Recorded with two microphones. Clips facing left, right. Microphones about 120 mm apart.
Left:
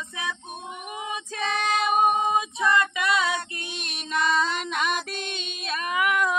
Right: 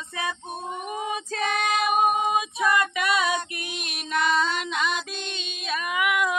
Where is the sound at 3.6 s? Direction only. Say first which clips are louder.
Right 1 dB; 30° left (ahead or behind).